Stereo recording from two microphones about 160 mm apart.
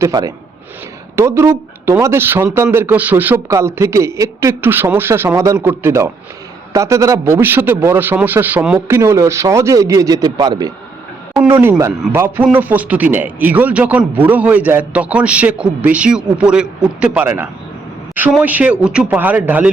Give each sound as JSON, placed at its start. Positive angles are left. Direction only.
{"t": 0.0, "sound": "a man's voice", "side_deg": -20}